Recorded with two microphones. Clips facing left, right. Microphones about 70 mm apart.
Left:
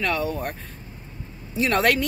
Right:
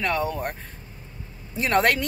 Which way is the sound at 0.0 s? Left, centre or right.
Right.